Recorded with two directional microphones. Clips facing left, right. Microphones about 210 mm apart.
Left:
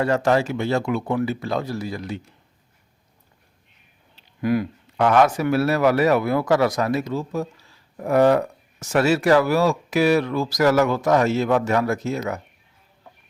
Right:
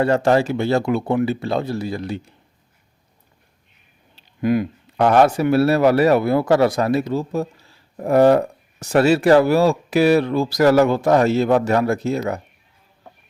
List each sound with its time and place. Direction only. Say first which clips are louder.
0.0 s speech: right 3 dB; 30° right (ahead or behind)
4.4 s speech: right 3 dB; 20° right (ahead or behind)
4.9 s speech: right 3 dB; 35° right (ahead or behind)